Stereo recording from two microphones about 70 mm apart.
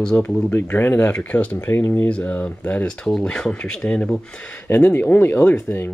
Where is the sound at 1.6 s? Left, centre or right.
Left.